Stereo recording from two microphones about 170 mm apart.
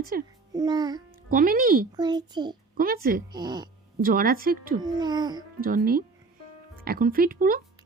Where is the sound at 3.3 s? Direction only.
25° right (ahead or behind).